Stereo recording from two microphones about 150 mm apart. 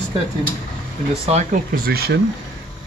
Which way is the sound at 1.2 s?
45° right (ahead or behind).